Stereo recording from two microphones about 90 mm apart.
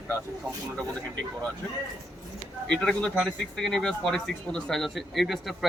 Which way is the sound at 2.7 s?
10° left (ahead or behind).